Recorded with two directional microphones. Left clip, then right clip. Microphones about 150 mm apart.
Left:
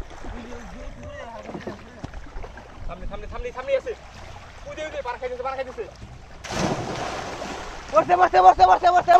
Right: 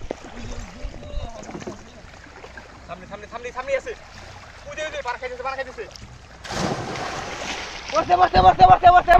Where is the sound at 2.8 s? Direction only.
60° left (ahead or behind).